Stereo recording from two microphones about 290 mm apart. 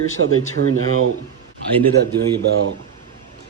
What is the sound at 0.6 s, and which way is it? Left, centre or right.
Speech, right.